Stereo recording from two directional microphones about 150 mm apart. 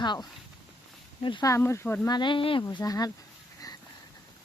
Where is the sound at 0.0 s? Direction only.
30° left (ahead or behind); by 2.0 s 15° left (ahead or behind).